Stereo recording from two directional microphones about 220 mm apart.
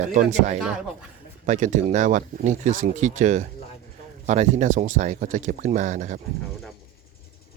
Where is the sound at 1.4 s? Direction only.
35° right (ahead or behind).